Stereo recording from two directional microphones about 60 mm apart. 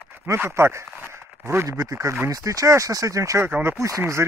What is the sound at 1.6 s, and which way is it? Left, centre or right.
Speech, right.